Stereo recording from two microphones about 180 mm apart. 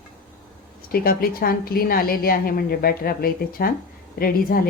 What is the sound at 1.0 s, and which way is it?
A woman's voice, 55° left (ahead or behind).